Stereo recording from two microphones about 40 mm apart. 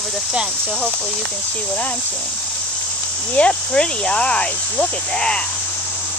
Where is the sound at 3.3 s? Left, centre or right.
Left.